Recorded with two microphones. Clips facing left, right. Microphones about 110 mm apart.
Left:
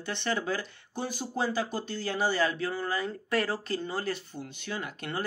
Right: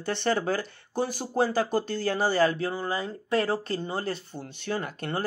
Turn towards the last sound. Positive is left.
turn(degrees=-40)  # may be behind; listen again after turning